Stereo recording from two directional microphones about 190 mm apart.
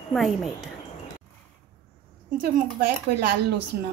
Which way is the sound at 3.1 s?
60° right (ahead or behind).